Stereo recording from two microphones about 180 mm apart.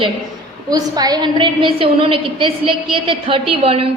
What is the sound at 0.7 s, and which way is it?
A woman's voice, 20° right (ahead or behind).